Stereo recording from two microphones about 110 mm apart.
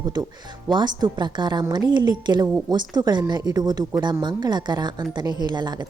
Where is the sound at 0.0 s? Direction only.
40° right (ahead or behind).